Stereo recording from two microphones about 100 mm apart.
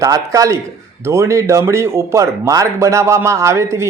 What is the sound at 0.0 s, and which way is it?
A man's voice, 35° right (ahead or behind).